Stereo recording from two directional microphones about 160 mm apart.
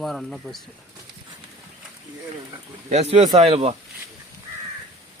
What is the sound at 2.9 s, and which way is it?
Speech, 45° right (ahead or behind).